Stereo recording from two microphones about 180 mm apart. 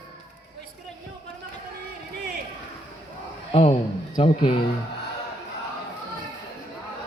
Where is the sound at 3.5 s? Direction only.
35° left (ahead or behind).